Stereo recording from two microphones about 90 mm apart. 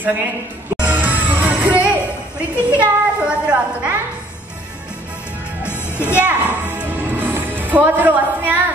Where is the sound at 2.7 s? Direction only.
10° right (ahead or behind).